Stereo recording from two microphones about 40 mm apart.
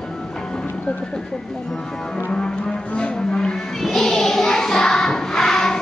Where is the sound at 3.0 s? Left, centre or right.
Centre.